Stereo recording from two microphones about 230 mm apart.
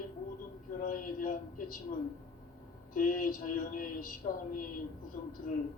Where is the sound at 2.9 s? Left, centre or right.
Left.